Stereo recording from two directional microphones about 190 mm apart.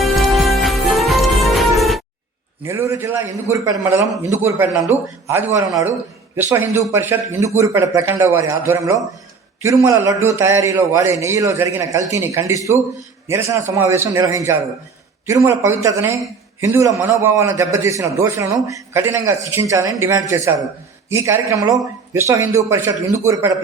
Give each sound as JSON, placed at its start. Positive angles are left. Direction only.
{"t": 0.0, "sound": "music", "side_deg": 0}
{"t": 2.6, "sound": "a man's voice", "side_deg": -15}